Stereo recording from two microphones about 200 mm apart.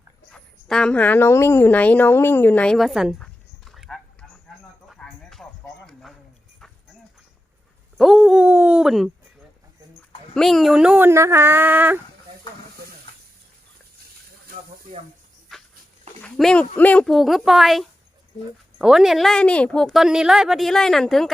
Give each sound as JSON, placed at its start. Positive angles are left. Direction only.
{"t": 0.3, "sound": "a woman's voice", "side_deg": 5}
{"t": 4.9, "sound": "a sound", "side_deg": 0}
{"t": 7.9, "sound": "a woman's voice", "side_deg": 0}
{"t": 10.3, "sound": "speech", "side_deg": 0}
{"t": 15.5, "sound": "a sound", "side_deg": 0}
{"t": 16.2, "sound": "a woman's voice", "side_deg": 5}